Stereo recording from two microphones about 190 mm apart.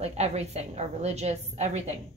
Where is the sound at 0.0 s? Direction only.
35° right (ahead or behind).